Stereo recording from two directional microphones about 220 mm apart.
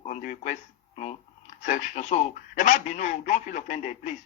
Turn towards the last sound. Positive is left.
turn(degrees=35)  # may be behind; listen again after turning